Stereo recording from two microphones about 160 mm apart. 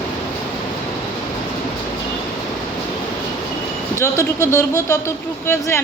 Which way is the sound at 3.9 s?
20° left (ahead or behind).